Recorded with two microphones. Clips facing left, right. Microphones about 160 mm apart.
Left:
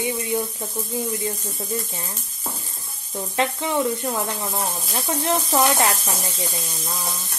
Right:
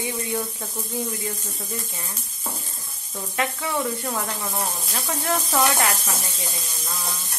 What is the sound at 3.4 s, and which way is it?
Speech, 25° left (ahead or behind).